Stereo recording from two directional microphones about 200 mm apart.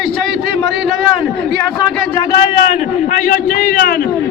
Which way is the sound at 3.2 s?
40° left (ahead or behind).